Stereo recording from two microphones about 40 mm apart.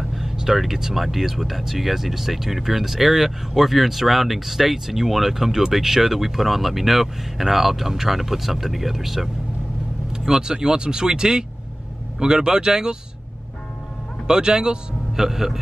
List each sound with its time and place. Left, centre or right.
0.1 s a man's voice: centre
14.2 s a man's voice: centre